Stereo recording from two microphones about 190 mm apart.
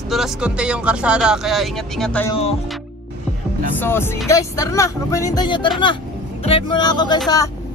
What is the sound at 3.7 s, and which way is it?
Speech, 10° left (ahead or behind).